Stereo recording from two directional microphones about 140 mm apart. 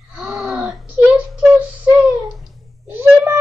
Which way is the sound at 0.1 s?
5° right (ahead or behind).